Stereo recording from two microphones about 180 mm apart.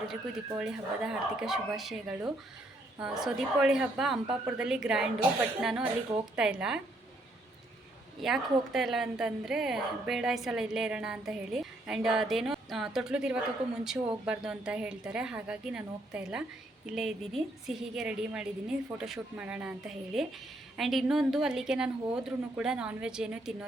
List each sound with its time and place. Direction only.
0.1 s a woman's voice: 5° right (ahead or behind)
8.2 s a woman's voice: centre (ahead or behind)